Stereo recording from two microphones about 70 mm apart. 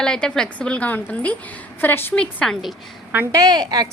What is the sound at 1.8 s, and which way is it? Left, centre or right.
Speech, left.